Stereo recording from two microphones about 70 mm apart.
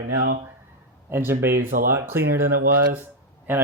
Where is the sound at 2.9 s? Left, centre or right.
Right.